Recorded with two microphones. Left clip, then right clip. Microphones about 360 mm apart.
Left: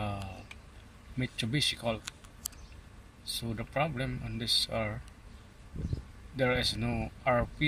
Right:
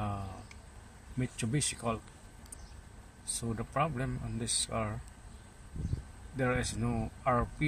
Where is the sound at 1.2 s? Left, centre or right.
Centre.